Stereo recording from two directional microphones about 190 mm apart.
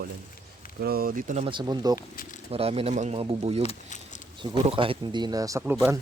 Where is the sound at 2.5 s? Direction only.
30° right (ahead or behind).